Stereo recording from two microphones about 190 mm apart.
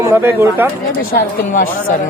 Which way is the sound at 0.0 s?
15° right (ahead or behind).